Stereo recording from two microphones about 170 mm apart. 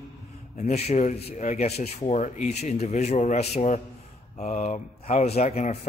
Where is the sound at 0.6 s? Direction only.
40° left (ahead or behind).